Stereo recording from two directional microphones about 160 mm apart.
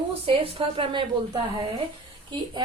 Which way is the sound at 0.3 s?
30° right (ahead or behind).